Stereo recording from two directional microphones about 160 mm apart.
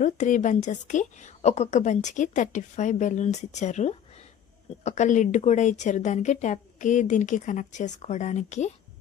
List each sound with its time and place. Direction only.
0.0 s a woman's voice: 50° left (ahead or behind)